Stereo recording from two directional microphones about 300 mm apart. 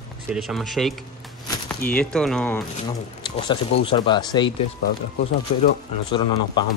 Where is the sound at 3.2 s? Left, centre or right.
Centre.